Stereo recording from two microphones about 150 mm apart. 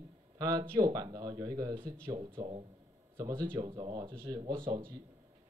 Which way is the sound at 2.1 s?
40° right (ahead or behind).